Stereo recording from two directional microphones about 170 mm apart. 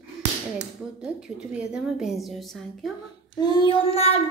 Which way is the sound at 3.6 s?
35° left (ahead or behind).